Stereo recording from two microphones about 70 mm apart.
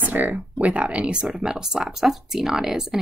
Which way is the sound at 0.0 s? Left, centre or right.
Right.